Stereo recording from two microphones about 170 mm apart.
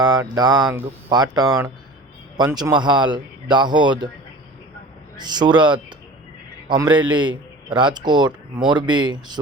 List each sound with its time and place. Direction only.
0.0 s a man's voice: 20° right (ahead or behind)
5.1 s a man's voice: 25° right (ahead or behind)